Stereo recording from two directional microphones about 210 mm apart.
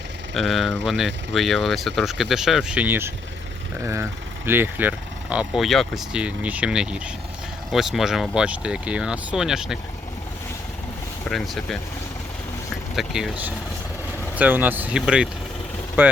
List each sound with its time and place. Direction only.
0.3 s speech: centre (ahead or behind)
11.3 s speech: centre (ahead or behind)
13.0 s speech: centre (ahead or behind)